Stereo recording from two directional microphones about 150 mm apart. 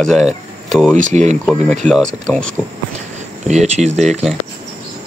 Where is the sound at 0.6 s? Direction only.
Centre (ahead or behind).